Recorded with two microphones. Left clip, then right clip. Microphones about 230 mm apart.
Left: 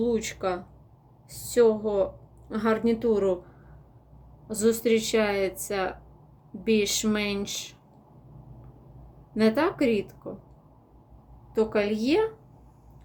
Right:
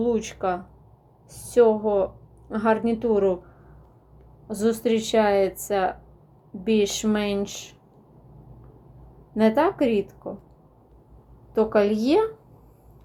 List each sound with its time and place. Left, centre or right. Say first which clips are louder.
0.0 s a woman's voice: right 3 dB; centre
4.4 s speech: even; centre
9.3 s speech: right 4 dB; centre
11.5 s speech: right 5 dB; centre